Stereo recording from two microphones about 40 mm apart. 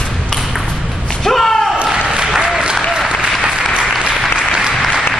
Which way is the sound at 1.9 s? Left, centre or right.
Centre.